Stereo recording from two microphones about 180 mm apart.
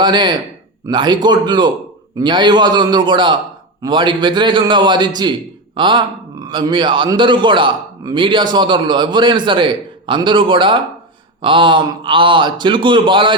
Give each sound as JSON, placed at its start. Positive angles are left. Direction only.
{"t": 0.0, "sound": "a man's voice", "side_deg": -25}